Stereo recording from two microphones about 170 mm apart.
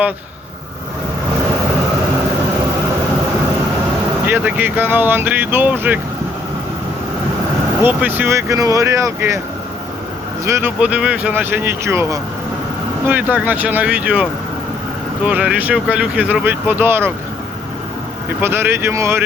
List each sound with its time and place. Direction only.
4.3 s speech: 10° right (ahead or behind)
7.9 s speech: 10° right (ahead or behind)
10.4 s speech: 15° right (ahead or behind)
18.3 s speech: 15° right (ahead or behind)